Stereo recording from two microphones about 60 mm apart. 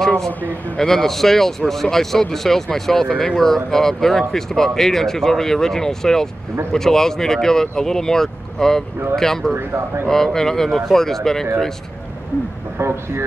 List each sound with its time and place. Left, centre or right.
0.7 s speech: centre
12.7 s speech: right